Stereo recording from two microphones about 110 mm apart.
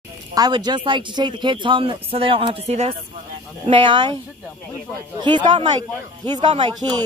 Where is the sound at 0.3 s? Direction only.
35° right (ahead or behind); by 3.0 s 70° right (ahead or behind).